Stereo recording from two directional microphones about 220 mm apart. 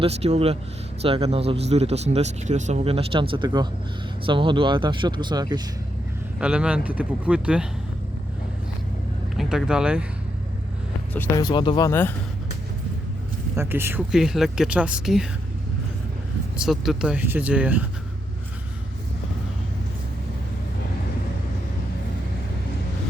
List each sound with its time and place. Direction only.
0.0 s speech: 30° right (ahead or behind)
6.4 s speech: 5° right (ahead or behind)
9.4 s speech: centre (ahead or behind)
11.1 s speech: 10° left (ahead or behind)
13.6 s speech: 10° right (ahead or behind)
16.6 s speech: centre (ahead or behind)